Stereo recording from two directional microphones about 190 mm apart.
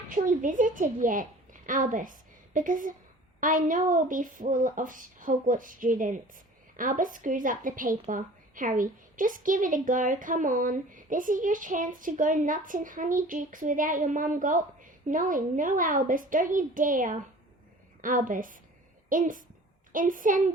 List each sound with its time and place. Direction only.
0.1 s a woman's voice: 45° right (ahead or behind)